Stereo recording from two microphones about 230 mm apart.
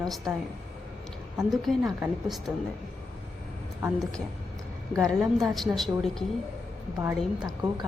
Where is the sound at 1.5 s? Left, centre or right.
Centre.